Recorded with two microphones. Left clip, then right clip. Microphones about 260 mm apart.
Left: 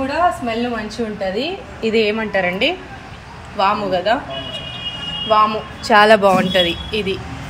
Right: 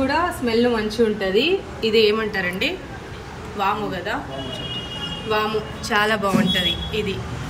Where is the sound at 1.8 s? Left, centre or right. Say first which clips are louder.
Left 1 dB; centre.